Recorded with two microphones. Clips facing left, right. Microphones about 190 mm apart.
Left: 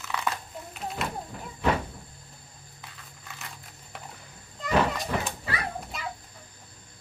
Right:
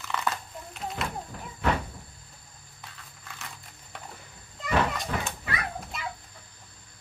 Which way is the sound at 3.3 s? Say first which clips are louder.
Even; centre (ahead or behind).